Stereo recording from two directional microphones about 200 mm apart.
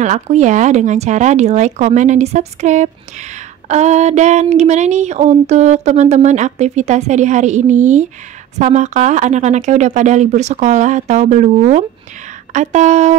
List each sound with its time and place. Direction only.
0.0 s speech: 35° right (ahead or behind)